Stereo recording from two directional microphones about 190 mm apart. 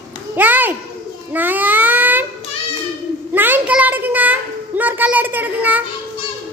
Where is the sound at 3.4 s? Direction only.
10° right (ahead or behind).